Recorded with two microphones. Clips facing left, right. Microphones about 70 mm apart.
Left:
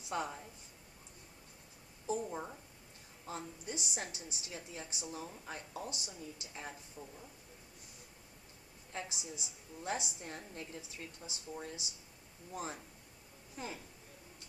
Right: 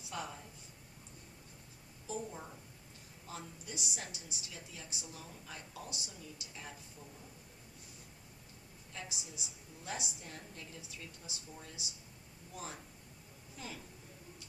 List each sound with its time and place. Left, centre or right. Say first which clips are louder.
0.1 s a woman's voice: left 5 dB; left
2.3 s a woman's voice: left 5 dB; left
8.9 s a woman's voice: left 4 dB; left